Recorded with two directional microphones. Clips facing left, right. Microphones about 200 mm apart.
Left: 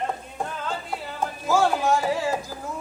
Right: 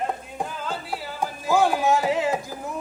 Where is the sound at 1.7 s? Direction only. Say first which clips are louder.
Right 1 dB; 5° right (ahead or behind).